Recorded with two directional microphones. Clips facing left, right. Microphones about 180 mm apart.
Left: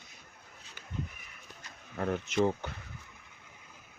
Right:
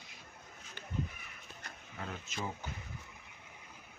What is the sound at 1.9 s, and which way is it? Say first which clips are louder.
Speech: left 13 dB; 60° left (ahead or behind).